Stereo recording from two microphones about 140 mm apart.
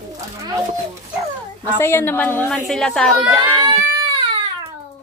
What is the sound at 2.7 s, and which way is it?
Speech, 5° left (ahead or behind).